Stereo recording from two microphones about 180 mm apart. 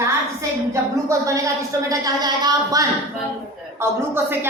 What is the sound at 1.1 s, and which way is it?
A woman's voice, 20° right (ahead or behind).